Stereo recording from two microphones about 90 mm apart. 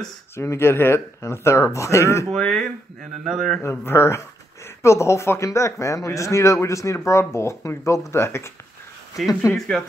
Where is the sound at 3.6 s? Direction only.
30° left (ahead or behind).